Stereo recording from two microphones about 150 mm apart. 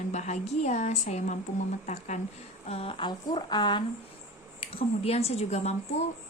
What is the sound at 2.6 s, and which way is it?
A woman's voice, 40° left (ahead or behind).